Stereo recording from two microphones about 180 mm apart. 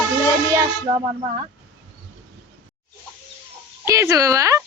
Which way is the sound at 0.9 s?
25° right (ahead or behind).